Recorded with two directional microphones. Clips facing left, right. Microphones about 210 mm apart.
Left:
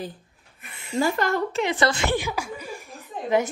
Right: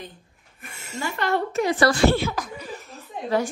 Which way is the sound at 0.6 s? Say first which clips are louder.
Right 3 dB; 45° right (ahead or behind).